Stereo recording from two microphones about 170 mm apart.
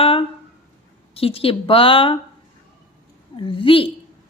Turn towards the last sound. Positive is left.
turn(degrees=30)  # may be behind; listen again after turning